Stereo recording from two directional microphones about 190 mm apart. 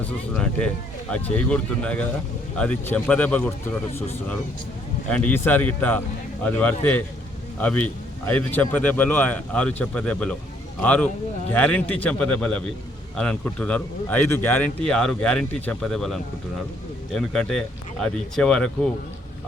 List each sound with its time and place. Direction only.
0.0 s a man's voice: 5° left (ahead or behind)
5.0 s a man's voice: 5° left (ahead or behind)